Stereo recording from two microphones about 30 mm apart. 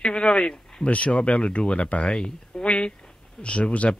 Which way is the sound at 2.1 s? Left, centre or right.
Left.